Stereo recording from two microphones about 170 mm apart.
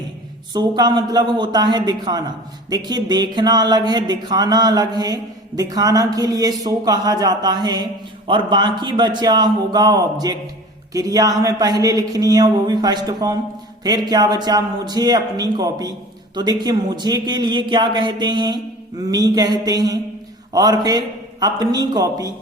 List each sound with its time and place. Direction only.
0.5 s speech: 25° right (ahead or behind)